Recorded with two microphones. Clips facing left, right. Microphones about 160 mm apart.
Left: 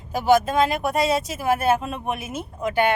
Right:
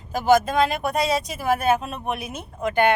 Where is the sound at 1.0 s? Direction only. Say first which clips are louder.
Left 1 dB; 5° left (ahead or behind).